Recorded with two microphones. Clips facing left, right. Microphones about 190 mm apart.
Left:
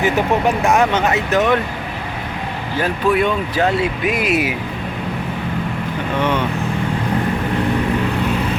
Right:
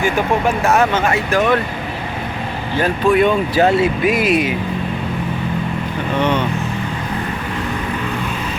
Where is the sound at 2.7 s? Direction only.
5° left (ahead or behind).